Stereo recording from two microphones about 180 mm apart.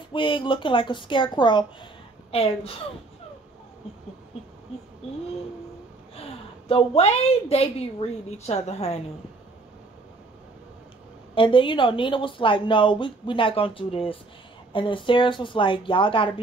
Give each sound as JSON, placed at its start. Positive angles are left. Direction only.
{"t": 0.1, "sound": "a woman's voice", "side_deg": 30}
{"t": 6.7, "sound": "a woman's voice", "side_deg": 35}
{"t": 11.3, "sound": "speech", "side_deg": 30}